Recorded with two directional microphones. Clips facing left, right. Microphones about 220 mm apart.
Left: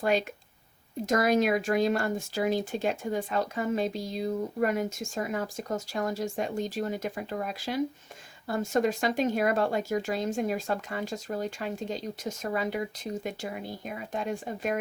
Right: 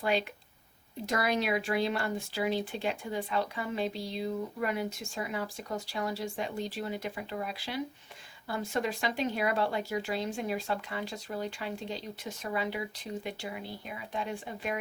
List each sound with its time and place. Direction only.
0.0 s speech: 45° left (ahead or behind)